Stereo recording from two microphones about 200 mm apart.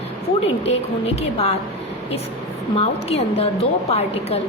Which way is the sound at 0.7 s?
30° left (ahead or behind).